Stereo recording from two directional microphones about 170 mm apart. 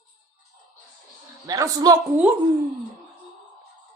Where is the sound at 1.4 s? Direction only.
20° right (ahead or behind).